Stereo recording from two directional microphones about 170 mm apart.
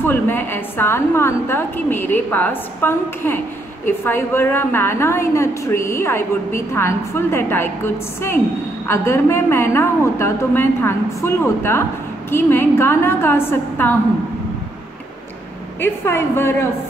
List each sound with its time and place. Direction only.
0.0 s a woman's voice: 10° left (ahead or behind)
15.8 s a woman's voice: 15° left (ahead or behind)